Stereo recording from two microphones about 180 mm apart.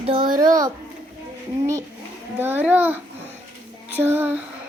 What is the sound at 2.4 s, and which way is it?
Child singing, 10° right (ahead or behind).